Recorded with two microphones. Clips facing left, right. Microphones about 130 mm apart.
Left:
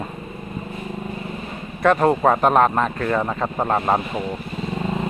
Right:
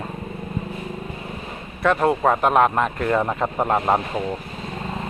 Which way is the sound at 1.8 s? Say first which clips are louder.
Left 2 dB; centre (ahead or behind).